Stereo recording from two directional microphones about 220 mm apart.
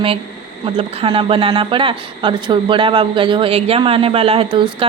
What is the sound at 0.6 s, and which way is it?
Speech, 25° right (ahead or behind).